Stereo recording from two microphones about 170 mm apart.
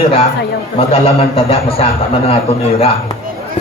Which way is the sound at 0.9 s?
35° left (ahead or behind).